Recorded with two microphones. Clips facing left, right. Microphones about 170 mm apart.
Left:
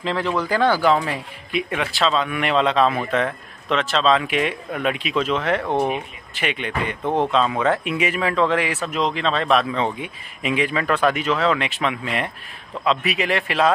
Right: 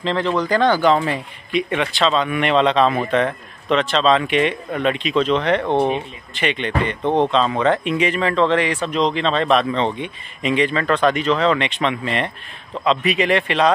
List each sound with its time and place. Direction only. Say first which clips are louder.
0.0 s speech: right 3 dB; 5° left (ahead or behind)
5.8 s speech: right 3 dB; 30° right (ahead or behind)
6.3 s speech: right 4 dB; 5° left (ahead or behind)